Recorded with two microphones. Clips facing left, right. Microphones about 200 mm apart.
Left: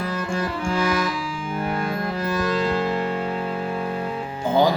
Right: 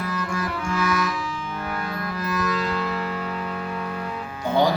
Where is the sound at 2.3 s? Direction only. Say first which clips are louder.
Left 3 dB; 30° left (ahead or behind).